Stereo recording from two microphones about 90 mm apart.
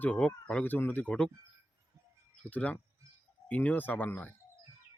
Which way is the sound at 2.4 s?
15° left (ahead or behind).